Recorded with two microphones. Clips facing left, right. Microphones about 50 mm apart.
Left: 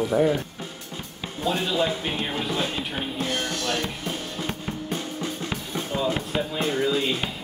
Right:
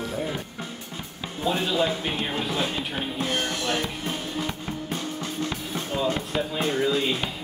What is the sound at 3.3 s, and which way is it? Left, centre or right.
Music, centre.